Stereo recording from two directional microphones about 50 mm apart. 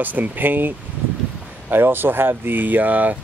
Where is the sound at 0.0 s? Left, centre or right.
Right.